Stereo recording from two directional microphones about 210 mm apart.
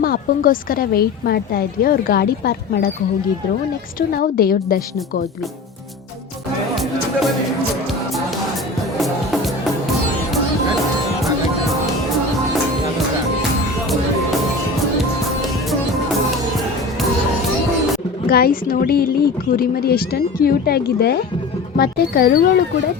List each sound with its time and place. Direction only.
0.0 s a woman's voice: 45° left (ahead or behind)
4.1 s a woman's voice: 45° left (ahead or behind)
9.0 s music: centre (ahead or behind)
18.3 s a woman's voice: 45° left (ahead or behind)